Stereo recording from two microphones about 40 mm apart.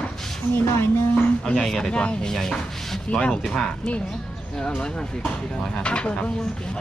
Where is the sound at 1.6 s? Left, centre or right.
Centre.